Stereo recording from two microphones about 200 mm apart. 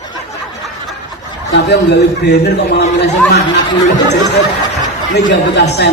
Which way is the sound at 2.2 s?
55° left (ahead or behind).